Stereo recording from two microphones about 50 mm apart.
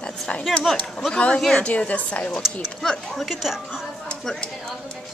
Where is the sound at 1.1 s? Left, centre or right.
Left.